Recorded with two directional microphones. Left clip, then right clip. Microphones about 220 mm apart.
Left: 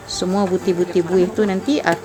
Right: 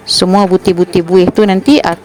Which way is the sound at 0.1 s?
35° right (ahead or behind).